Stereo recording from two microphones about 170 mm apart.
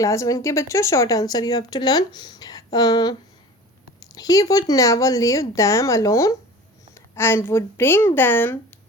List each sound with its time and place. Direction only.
0.0 s a woman's voice: 20° left (ahead or behind)